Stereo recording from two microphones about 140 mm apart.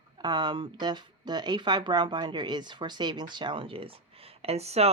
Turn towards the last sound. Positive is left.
turn(degrees=-50)  # may be behind; listen again after turning